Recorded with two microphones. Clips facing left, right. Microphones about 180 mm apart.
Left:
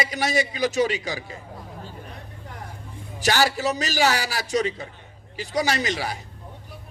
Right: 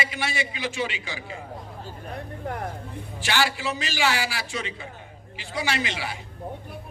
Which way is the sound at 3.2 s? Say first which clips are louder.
Left 4 dB; 40° left (ahead or behind).